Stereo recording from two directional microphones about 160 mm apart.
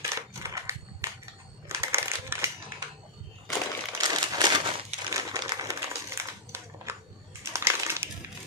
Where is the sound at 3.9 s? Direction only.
25° right (ahead or behind).